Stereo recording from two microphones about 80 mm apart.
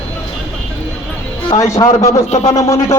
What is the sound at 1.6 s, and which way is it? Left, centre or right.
A man's voice, left.